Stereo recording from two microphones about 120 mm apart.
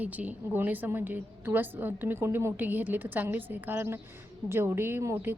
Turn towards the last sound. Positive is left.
turn(degrees=-20)  # may be behind; listen again after turning